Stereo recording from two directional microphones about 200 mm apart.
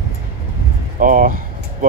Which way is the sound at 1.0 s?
45° right (ahead or behind).